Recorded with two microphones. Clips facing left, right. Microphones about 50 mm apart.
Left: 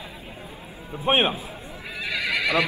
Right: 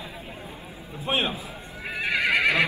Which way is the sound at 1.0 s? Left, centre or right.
Left.